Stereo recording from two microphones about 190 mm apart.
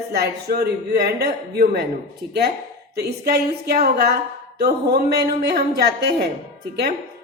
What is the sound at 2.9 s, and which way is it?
Speech, 55° right (ahead or behind).